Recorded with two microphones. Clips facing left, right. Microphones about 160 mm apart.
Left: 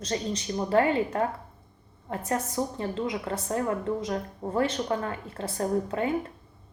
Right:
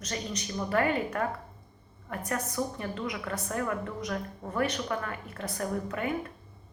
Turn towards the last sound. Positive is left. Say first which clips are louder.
# left 5 dB
turn(degrees=25)  # may be behind; listen again after turning